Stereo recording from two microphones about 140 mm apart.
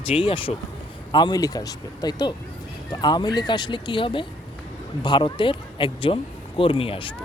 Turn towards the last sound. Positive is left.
turn(degrees=40)  # may be behind; listen again after turning